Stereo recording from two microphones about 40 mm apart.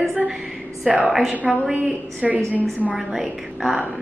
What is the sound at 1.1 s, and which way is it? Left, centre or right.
A woman's voice, centre.